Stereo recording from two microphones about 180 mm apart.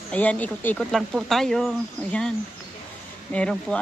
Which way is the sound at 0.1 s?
5° left (ahead or behind).